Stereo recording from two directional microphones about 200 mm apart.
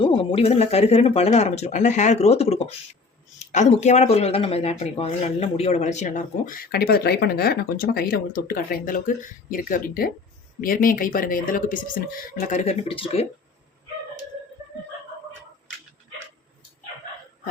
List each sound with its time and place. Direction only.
0.0 s speech: 25° left (ahead or behind)